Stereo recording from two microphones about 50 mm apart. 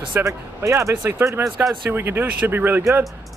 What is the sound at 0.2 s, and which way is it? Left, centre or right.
Speech, right.